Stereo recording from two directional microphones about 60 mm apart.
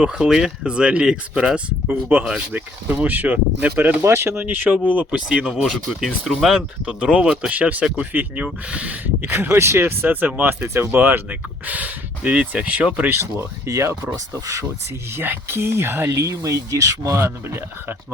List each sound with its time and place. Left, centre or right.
0.0 s speech: centre
1.9 s speech: right
4.0 s speech: right
4.4 s speech: right
5.3 s speech: centre
6.2 s speech: centre
6.8 s speech: centre
9.2 s speech: right
13.1 s speech: right
13.7 s speech: right
15.1 s speech: right
16.1 s speech: right
17.2 s speech: right